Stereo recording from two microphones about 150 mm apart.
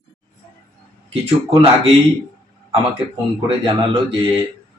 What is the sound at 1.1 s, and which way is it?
Speech, 40° right (ahead or behind).